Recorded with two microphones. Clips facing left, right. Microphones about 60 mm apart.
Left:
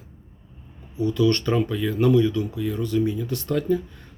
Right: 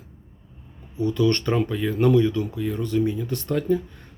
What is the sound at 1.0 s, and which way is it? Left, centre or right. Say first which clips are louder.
Speech: even; right.